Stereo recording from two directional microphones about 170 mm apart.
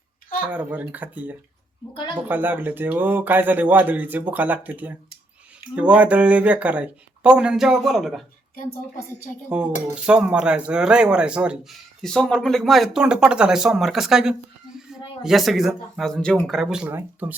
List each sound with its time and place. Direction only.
0.5 s speech: 10° right (ahead or behind)
1.9 s speech: 30° left (ahead or behind)
2.2 s speech: 10° right (ahead or behind)
9.5 s speech: 5° right (ahead or behind)